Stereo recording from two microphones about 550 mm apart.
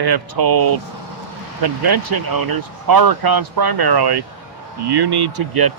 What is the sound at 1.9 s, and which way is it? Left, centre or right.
Speech, right.